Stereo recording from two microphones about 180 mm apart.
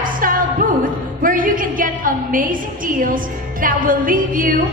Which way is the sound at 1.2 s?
50° right (ahead or behind).